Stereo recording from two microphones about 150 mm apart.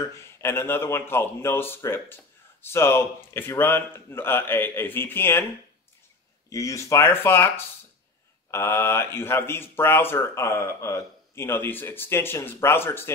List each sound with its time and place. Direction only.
0.1 s speech: 15° left (ahead or behind)
6.5 s speech: 20° left (ahead or behind)